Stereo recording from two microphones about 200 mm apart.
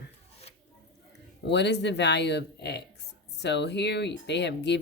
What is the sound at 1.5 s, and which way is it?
Speech, 60° left (ahead or behind).